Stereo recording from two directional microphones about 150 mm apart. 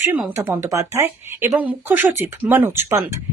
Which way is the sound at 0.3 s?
20° right (ahead or behind).